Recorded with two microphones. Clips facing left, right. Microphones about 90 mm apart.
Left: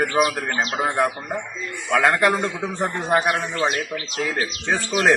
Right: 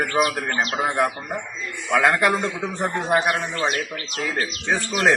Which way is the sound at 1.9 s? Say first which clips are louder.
Left 1 dB; centre (ahead or behind).